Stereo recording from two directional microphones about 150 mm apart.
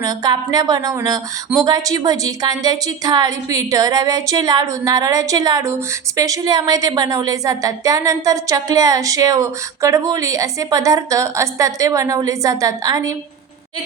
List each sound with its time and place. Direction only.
0.0 s a woman's voice: 25° right (ahead or behind)